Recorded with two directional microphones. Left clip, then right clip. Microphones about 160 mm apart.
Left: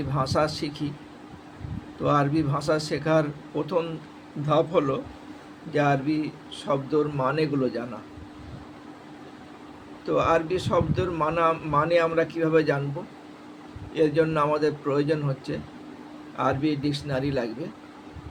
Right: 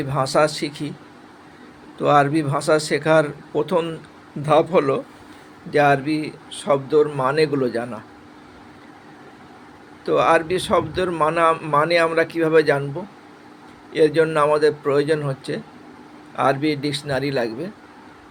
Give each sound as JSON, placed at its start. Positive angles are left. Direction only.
{"t": 0.1, "sound": "a man's voice", "side_deg": -50}
{"t": 2.0, "sound": "a man's voice", "side_deg": -50}
{"t": 10.1, "sound": "a man's voice", "side_deg": -55}
{"t": 13.9, "sound": "a man's voice", "side_deg": -50}